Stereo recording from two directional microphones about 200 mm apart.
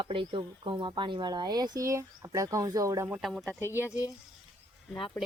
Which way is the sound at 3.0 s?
5° right (ahead or behind).